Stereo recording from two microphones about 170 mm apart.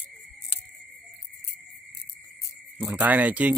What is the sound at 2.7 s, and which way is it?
Speech, 10° right (ahead or behind).